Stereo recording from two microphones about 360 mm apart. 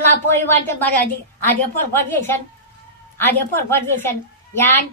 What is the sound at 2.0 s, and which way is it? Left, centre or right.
A woman's voice, centre.